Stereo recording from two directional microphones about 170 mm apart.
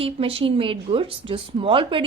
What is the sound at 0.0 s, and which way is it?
A woman's voice, 35° right (ahead or behind).